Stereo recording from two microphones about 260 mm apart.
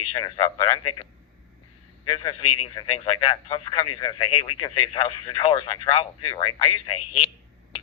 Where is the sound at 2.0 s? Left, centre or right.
Centre.